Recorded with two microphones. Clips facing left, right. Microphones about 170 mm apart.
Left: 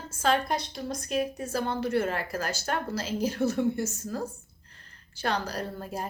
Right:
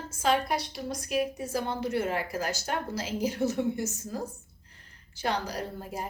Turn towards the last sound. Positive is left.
turn(degrees=-15)  # may be behind; listen again after turning